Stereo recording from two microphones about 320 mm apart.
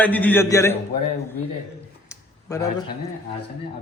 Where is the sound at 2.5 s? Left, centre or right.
Centre.